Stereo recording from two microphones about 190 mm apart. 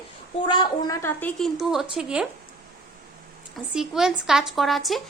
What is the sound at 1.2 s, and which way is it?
Speech, centre (ahead or behind).